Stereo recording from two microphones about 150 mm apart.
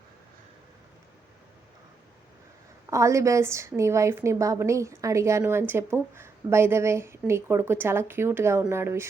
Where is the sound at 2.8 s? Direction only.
20° right (ahead or behind).